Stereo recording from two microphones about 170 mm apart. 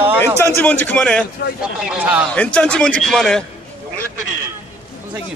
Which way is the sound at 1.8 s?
5° right (ahead or behind).